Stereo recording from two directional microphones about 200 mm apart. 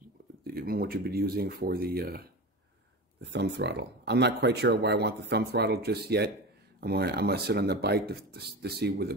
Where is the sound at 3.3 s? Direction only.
55° right (ahead or behind).